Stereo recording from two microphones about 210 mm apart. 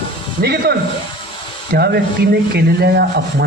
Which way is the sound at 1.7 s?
50° right (ahead or behind).